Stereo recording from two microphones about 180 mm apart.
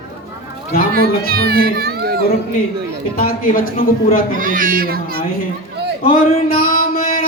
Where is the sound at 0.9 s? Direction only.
55° right (ahead or behind).